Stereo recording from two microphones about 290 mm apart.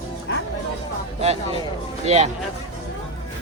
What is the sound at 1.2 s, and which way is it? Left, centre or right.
Speech, right.